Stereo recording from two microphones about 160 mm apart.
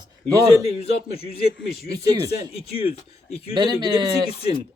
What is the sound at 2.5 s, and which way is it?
Speech, 35° left (ahead or behind).